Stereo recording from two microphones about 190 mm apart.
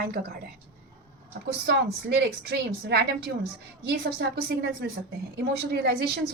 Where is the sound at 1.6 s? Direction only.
60° right (ahead or behind).